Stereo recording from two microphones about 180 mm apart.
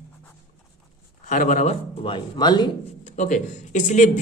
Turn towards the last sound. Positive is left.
turn(degrees=45)  # may be behind; listen again after turning